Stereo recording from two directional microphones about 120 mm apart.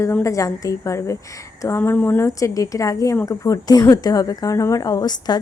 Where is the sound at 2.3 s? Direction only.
30° left (ahead or behind).